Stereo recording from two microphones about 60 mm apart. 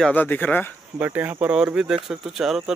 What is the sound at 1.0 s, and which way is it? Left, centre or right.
Speech, right.